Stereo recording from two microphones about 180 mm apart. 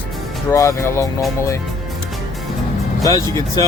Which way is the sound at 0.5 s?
15° left (ahead or behind).